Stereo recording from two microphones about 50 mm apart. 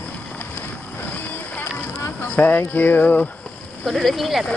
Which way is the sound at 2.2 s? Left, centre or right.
Left.